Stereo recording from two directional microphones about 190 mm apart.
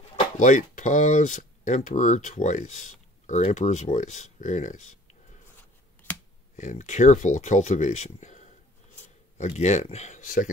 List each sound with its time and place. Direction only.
0.4 s speech: 40° left (ahead or behind)
6.5 s speech: 40° left (ahead or behind)